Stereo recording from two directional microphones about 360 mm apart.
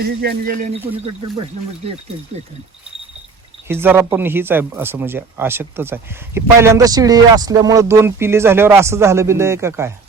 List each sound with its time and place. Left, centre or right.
0.0 s speech: right
1.8 s speech: centre
3.7 s speech: centre